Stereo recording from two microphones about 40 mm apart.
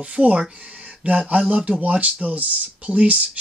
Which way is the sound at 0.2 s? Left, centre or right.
Right.